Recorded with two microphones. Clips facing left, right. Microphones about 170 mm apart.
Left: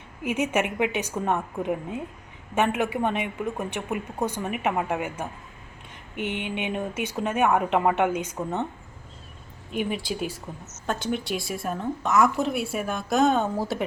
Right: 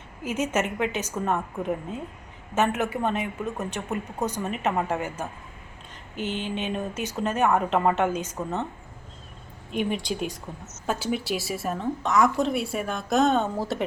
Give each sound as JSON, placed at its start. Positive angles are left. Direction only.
{"t": 0.3, "sound": "a woman's voice", "side_deg": 15}
{"t": 9.7, "sound": "a woman's voice", "side_deg": 5}